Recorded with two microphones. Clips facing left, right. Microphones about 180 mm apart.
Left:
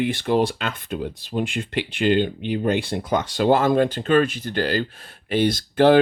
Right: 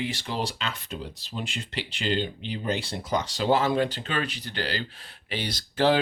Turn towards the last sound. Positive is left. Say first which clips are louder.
# left 8 dB
turn(degrees=55)  # may be behind; listen again after turning